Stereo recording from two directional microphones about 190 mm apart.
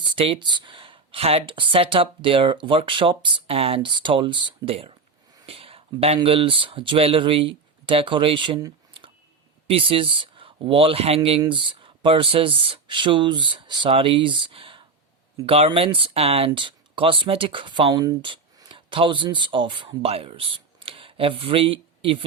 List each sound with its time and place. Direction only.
0.0 s speech: 25° right (ahead or behind)